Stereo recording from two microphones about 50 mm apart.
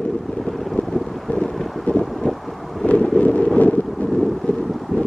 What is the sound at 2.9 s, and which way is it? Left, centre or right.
Wind noise, left.